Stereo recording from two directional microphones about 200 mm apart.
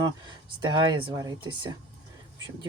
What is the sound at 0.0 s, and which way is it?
Speech, 20° right (ahead or behind).